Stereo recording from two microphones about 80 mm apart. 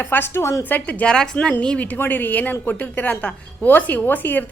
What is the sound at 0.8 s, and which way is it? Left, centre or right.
Speech, centre.